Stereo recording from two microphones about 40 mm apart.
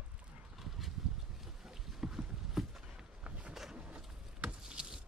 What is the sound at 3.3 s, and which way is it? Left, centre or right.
Vehicle, right.